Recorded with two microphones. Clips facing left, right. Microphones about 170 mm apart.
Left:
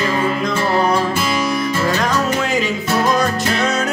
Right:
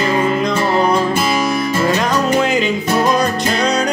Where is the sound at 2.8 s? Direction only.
20° right (ahead or behind).